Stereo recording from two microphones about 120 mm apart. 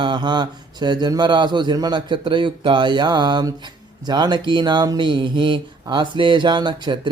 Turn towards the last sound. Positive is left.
turn(degrees=-40)  # may be behind; listen again after turning